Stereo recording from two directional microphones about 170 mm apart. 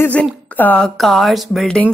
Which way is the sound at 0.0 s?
10° left (ahead or behind).